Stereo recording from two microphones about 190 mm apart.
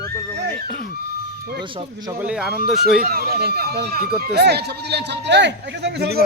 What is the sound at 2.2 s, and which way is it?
Speech, 5° right (ahead or behind).